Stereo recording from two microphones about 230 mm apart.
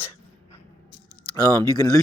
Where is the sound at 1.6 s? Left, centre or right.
Centre.